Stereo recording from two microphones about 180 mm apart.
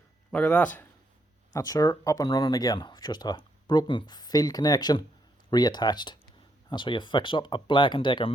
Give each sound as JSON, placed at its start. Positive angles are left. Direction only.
{"t": 0.3, "sound": "speech", "side_deg": 5}
{"t": 1.5, "sound": "speech", "side_deg": 20}